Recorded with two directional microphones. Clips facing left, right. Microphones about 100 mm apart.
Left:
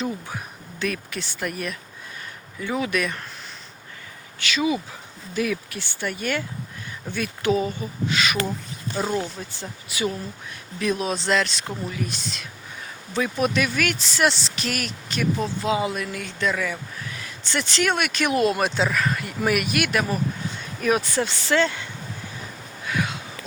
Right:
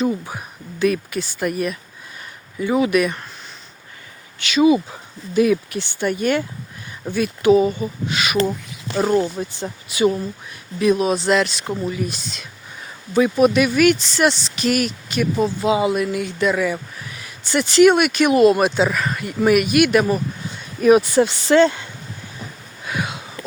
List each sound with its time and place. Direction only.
0.0 s speech: 5° right (ahead or behind)
4.5 s speech: 25° right (ahead or behind)
7.1 s speech: 15° right (ahead or behind)
9.0 s speech: 40° right (ahead or behind)
9.6 s speech: 20° right (ahead or behind)
10.8 s speech: 10° right (ahead or behind)
20.8 s speech: 15° right (ahead or behind)
22.9 s a sound: 20° right (ahead or behind)